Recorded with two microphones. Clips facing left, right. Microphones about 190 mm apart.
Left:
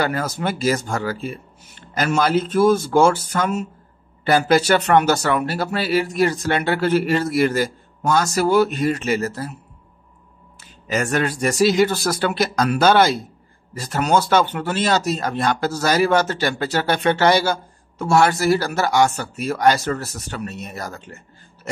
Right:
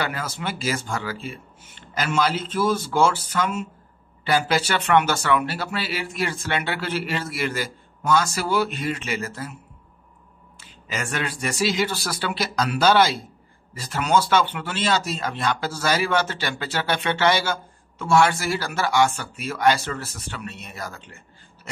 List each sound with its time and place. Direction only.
0.0 s speech: 45° left (ahead or behind)
10.6 s speech: 45° left (ahead or behind)